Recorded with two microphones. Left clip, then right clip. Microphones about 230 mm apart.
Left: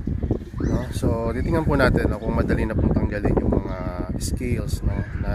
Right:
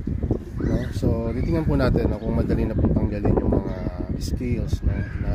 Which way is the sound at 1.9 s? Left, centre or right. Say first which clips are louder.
Left 1 dB; centre.